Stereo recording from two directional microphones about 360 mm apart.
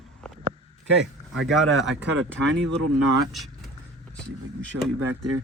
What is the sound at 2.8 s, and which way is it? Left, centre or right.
Speech, right.